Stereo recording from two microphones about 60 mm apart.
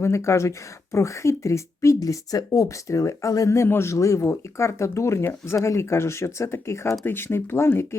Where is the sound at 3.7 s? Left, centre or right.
Left.